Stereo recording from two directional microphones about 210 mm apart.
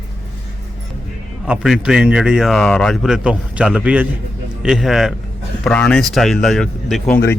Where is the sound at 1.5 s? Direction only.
Centre (ahead or behind).